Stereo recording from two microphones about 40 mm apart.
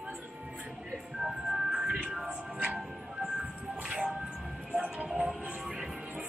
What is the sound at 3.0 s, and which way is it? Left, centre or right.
Music, right.